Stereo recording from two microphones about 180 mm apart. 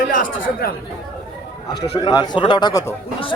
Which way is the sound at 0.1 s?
50° left (ahead or behind).